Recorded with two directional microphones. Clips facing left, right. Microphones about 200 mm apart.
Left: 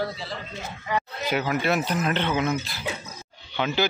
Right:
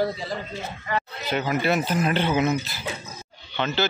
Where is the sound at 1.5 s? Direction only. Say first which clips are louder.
Right 3 dB; centre (ahead or behind).